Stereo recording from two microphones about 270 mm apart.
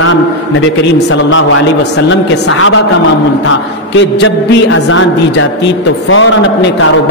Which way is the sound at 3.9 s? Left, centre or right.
Left.